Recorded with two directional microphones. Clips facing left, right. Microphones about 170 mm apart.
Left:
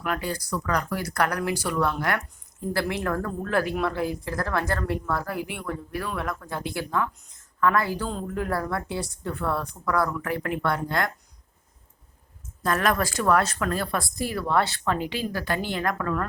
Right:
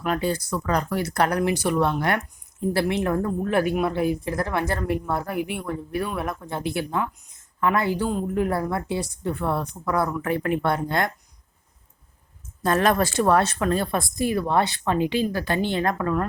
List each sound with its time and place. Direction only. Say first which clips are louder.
0.0 s speech: right 5 dB; 25° right (ahead or behind)
12.6 s speech: right 4 dB; 25° right (ahead or behind)